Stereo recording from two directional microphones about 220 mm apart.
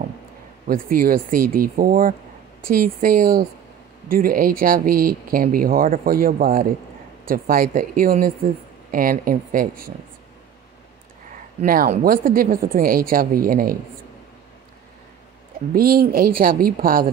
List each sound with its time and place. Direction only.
0.7 s speech: 40° right (ahead or behind)
11.6 s speech: 40° right (ahead or behind)
15.7 s speech: 40° right (ahead or behind)